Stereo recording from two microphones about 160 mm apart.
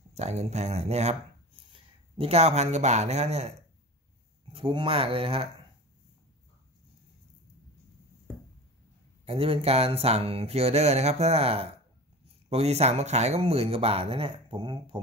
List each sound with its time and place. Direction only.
0.1 s speech: 45° right (ahead or behind)
9.2 s speech: 35° right (ahead or behind)